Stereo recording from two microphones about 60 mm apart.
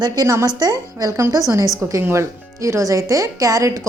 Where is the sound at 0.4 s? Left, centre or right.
Right.